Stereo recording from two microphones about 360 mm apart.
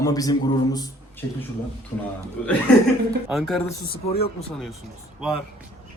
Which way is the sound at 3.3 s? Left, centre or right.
Centre.